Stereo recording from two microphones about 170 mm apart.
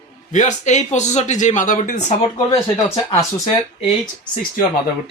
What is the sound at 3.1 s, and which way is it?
Speech, 20° left (ahead or behind).